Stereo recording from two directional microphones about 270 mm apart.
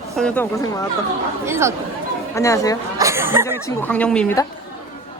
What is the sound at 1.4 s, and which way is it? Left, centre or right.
Speech, centre.